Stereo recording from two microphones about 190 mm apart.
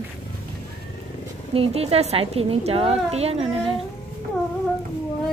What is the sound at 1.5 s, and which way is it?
A woman's voice, 30° right (ahead or behind).